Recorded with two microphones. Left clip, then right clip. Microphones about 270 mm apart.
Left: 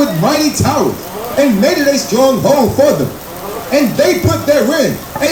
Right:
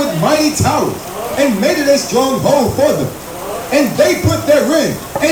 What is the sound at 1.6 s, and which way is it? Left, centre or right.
Speech, left.